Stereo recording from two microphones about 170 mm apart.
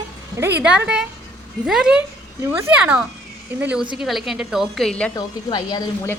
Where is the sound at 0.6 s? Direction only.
5° right (ahead or behind).